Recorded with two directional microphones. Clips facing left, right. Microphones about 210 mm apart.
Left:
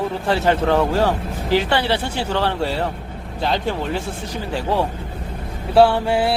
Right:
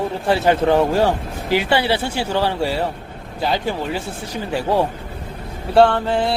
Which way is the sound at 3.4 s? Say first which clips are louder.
Even; 5° right (ahead or behind).